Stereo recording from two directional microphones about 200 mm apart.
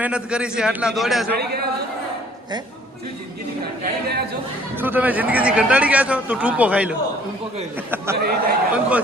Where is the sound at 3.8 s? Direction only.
50° right (ahead or behind).